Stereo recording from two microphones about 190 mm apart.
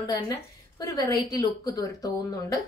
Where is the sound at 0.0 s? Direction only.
20° left (ahead or behind).